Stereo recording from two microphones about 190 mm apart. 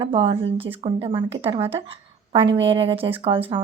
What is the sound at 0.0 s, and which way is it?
A woman's voice, 30° right (ahead or behind).